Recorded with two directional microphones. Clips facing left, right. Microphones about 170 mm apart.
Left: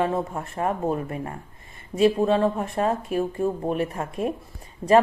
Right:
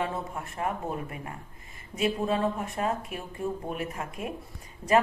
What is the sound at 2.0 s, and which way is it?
Speech, 30° left (ahead or behind).